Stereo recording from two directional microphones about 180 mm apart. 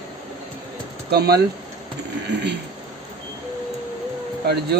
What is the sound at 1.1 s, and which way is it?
Speech, 60° right (ahead or behind).